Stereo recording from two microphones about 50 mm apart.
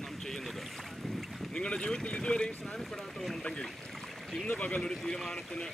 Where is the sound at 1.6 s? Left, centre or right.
Centre.